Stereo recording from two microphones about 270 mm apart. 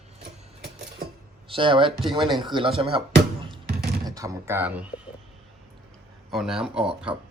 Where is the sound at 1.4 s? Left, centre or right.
Centre.